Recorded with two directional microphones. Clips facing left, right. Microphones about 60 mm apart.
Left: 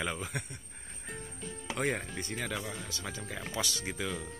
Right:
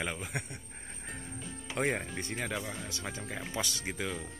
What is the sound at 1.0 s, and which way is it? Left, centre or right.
Music, centre.